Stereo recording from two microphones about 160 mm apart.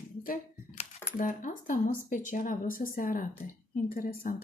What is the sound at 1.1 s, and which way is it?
Speech, 55° left (ahead or behind).